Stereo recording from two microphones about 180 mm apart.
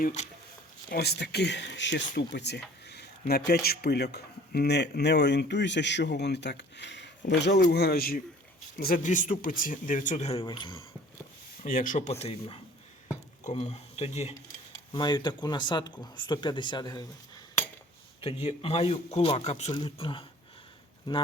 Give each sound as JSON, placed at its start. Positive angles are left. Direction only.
{"t": 0.0, "sound": "a man's voice", "side_deg": 40}
{"t": 0.9, "sound": "speech", "side_deg": 65}
{"t": 11.6, "sound": "speech", "side_deg": 50}
{"t": 12.2, "sound": "a man's voice", "side_deg": 35}
{"t": 14.9, "sound": "speech", "side_deg": 25}
{"t": 18.4, "sound": "a man's voice", "side_deg": 35}
{"t": 19.7, "sound": "speech", "side_deg": 25}